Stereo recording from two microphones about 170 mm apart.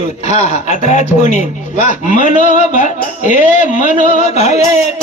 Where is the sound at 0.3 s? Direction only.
45° left (ahead or behind).